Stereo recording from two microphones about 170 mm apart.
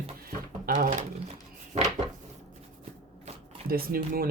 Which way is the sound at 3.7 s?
60° right (ahead or behind).